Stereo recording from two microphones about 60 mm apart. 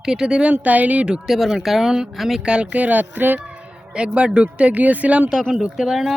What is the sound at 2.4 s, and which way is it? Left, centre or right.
Speech, centre.